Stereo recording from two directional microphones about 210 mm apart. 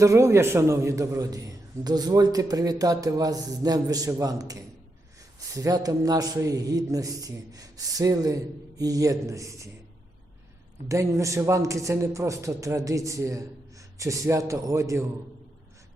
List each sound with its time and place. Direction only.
0.0 s a man's voice: 15° right (ahead or behind)
10.8 s a man's voice: 15° right (ahead or behind)